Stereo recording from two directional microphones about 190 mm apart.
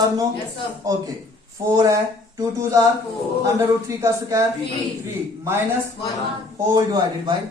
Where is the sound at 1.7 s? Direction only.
15° right (ahead or behind).